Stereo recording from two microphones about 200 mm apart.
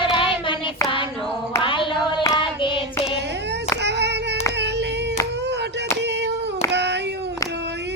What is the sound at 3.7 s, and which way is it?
Child singing, 60° right (ahead or behind).